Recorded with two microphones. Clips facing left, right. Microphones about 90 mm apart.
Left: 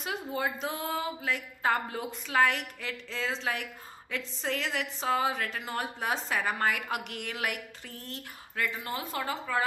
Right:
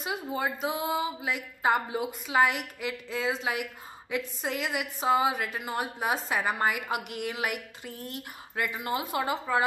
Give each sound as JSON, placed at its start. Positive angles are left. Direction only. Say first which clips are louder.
{"t": 0.0, "sound": "speech", "louder": "right 1 dB", "side_deg": -5}